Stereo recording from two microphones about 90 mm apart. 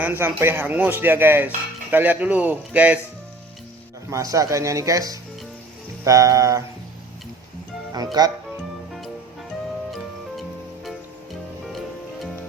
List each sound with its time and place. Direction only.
0.0 s speech: 20° right (ahead or behind)
4.1 s speech: 40° right (ahead or behind)
7.9 s speech: 45° right (ahead or behind)